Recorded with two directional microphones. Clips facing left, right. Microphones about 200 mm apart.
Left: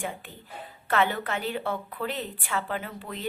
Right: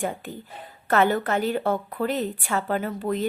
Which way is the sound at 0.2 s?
45° right (ahead or behind).